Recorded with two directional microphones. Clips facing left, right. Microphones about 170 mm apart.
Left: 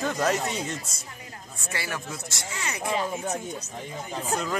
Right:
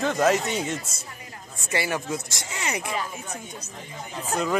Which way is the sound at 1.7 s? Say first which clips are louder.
Right 7 dB; 20° right (ahead or behind).